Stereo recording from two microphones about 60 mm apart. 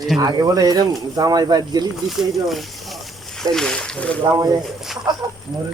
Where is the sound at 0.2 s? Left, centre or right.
Right.